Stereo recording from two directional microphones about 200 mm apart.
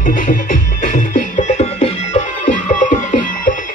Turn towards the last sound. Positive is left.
turn(degrees=40)  # may be behind; listen again after turning